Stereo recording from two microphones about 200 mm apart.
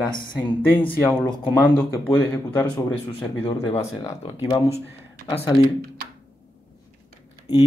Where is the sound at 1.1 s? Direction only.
5° left (ahead or behind).